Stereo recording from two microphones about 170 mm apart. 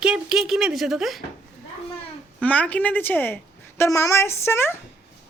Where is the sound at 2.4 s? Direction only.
10° left (ahead or behind).